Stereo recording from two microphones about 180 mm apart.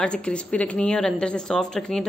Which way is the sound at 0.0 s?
5° left (ahead or behind).